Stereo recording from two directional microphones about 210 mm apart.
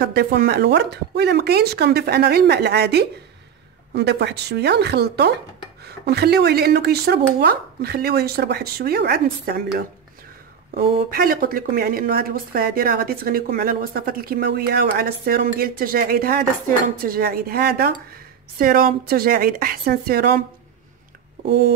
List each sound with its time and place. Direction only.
0.0 s speech: 50° right (ahead or behind)
10.8 s speech: 45° right (ahead or behind)